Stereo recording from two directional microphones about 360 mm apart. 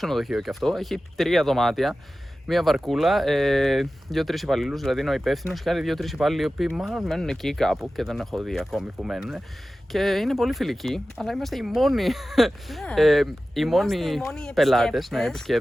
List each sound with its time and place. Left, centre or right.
0.0 s speech: centre